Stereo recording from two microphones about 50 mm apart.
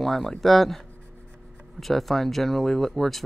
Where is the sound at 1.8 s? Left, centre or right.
Centre.